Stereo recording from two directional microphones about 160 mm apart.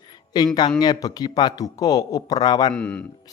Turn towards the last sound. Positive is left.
turn(degrees=5)  # may be behind; listen again after turning